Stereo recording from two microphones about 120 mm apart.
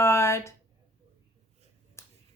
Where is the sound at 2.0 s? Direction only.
20° left (ahead or behind).